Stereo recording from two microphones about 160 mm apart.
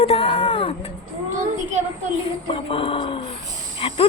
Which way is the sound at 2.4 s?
35° left (ahead or behind).